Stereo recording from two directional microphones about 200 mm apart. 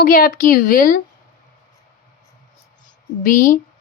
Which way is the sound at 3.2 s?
40° left (ahead or behind).